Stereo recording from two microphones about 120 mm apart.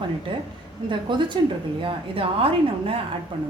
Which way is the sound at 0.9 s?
40° right (ahead or behind).